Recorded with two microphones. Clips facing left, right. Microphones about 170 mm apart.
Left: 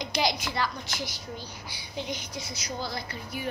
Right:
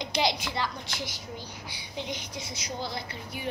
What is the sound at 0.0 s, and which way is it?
A woman's voice, 25° right (ahead or behind).